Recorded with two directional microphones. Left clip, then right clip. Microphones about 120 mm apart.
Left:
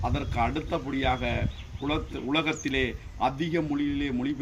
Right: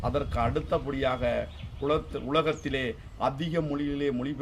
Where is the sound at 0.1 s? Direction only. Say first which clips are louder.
Even; 30° right (ahead or behind).